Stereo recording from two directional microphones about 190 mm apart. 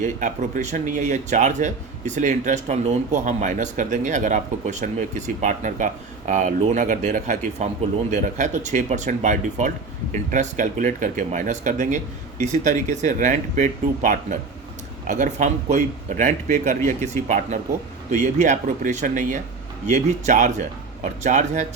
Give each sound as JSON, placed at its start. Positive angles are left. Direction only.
{"t": 0.0, "sound": "speech", "side_deg": -40}